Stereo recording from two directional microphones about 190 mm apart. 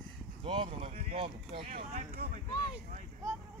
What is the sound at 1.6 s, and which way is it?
Speech, 40° right (ahead or behind).